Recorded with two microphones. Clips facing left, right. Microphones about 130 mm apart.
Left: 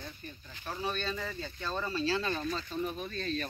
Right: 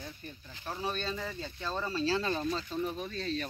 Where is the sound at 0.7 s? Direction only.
15° right (ahead or behind).